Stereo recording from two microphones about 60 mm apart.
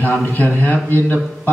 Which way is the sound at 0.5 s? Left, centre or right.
Left.